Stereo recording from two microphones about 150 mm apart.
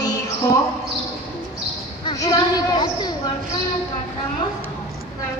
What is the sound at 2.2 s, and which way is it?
Speech, 25° left (ahead or behind).